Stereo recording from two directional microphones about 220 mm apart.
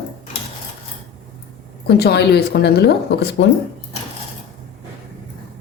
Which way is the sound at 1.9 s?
45° left (ahead or behind).